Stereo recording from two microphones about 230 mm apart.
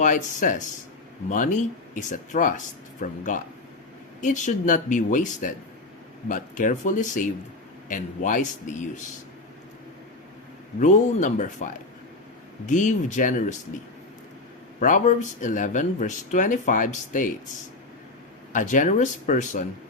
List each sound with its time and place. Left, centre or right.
0.0 s speech: left
10.8 s speech: left
14.8 s speech: left
18.5 s speech: left